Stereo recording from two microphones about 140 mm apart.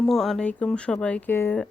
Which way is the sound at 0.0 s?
Centre (ahead or behind).